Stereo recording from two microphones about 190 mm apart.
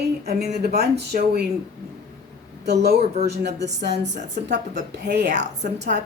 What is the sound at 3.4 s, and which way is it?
Speech, 65° right (ahead or behind).